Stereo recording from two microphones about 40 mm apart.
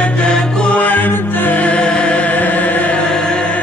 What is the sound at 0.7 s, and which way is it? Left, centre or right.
Music, left.